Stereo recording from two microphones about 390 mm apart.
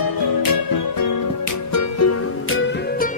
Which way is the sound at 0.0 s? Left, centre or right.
Left.